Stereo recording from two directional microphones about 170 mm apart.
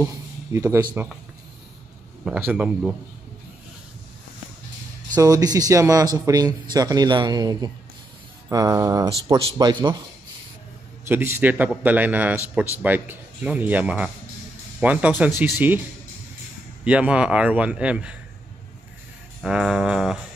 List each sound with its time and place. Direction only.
0.0 s a man's voice: 15° right (ahead or behind)
2.2 s music: 5° right (ahead or behind)
5.1 s speech: 20° right (ahead or behind)
11.1 s a man's voice: 15° right (ahead or behind)
16.8 s a man's voice: 5° right (ahead or behind)
19.4 s music: 5° right (ahead or behind)